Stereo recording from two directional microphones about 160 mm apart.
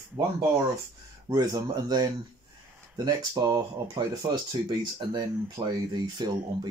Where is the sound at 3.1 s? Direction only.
25° right (ahead or behind).